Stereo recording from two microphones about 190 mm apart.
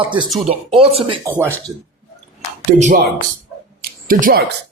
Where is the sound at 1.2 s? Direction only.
15° right (ahead or behind).